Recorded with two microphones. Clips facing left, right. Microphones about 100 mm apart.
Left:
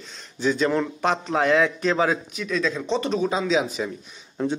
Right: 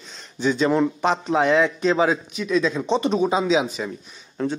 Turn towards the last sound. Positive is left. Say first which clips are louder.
# even
turn(degrees=5)  # may be behind; listen again after turning